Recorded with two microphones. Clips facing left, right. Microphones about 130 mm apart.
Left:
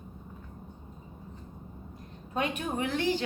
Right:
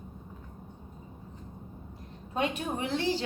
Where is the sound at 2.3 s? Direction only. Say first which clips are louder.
Even; 30° right (ahead or behind).